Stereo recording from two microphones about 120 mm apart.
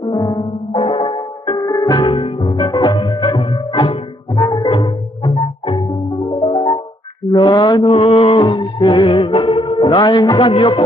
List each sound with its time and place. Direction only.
0.0 s music: 35° left (ahead or behind)
2.1 s music: 50° left (ahead or behind)
6.5 s music: 30° left (ahead or behind)
10.5 s speech: 45° left (ahead or behind)